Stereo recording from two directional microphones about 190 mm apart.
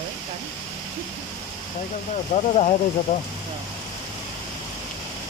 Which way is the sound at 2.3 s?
35° left (ahead or behind).